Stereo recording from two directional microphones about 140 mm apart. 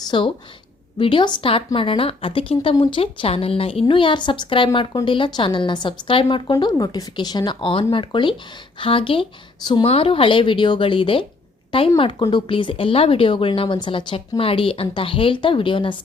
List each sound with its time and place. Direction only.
0.0 s speech: 35° left (ahead or behind)